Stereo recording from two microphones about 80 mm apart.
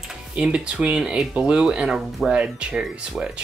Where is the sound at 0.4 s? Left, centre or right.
Centre.